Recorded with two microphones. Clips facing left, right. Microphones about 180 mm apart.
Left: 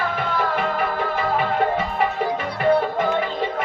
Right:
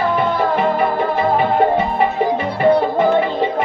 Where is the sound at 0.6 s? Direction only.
40° right (ahead or behind).